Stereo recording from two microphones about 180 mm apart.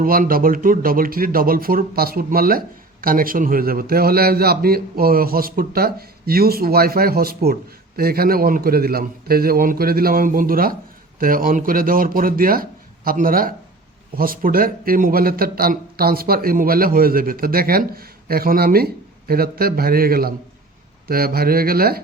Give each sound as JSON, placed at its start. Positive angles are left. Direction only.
{"t": 0.0, "sound": "speech", "side_deg": -50}